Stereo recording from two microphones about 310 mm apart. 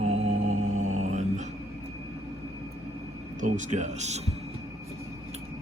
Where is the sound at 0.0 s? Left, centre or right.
Right.